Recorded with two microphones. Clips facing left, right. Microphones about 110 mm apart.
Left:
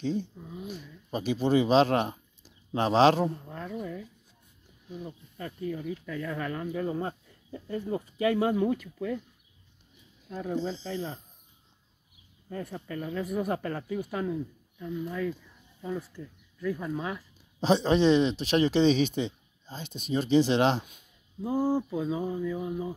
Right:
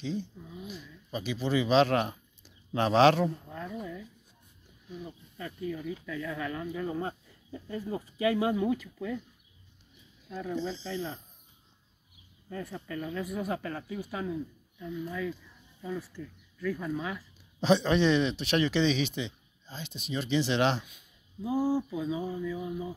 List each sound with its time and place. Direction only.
0.0 s speech: 50° left (ahead or behind); by 3.6 s 35° left (ahead or behind)
5.4 s speech: 40° left (ahead or behind)
10.3 s a sound: 40° left (ahead or behind)
12.4 s speech: 35° left (ahead or behind)
16.0 s speech: 25° left (ahead or behind)
21.5 s a sound: 50° left (ahead or behind)